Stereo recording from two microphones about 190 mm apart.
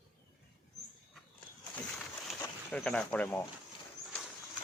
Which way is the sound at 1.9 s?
5° left (ahead or behind).